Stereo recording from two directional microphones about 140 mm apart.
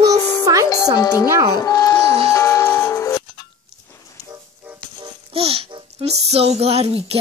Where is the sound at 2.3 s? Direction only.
20° left (ahead or behind).